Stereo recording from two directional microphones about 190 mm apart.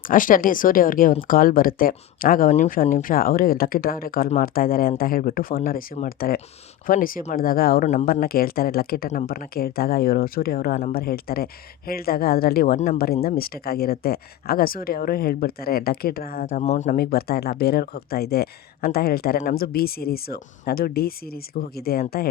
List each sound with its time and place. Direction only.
0.1 s speech: 45° left (ahead or behind)
16.5 s speech: 40° left (ahead or behind)